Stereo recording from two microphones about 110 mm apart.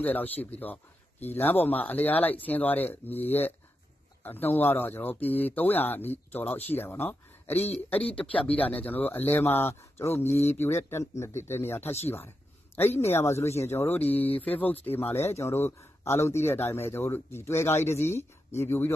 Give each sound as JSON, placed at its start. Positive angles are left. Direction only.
{"t": 0.0, "sound": "speech", "side_deg": 15}
{"t": 7.5, "sound": "speech", "side_deg": 75}
{"t": 8.2, "sound": "speech", "side_deg": 10}
{"t": 13.1, "sound": "speech", "side_deg": 25}